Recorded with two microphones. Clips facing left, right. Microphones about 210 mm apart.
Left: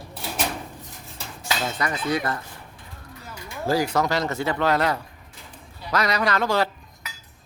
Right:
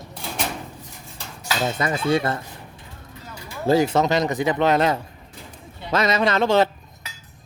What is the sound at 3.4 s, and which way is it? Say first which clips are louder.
Speech: right 5 dB; 25° right (ahead or behind).